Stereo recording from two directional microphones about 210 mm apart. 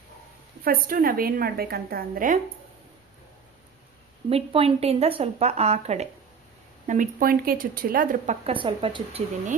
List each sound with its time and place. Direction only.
0.6 s a woman's voice: 45° right (ahead or behind)
4.3 s a woman's voice: 25° right (ahead or behind)